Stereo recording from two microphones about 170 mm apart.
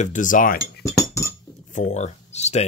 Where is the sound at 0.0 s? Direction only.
50° left (ahead or behind).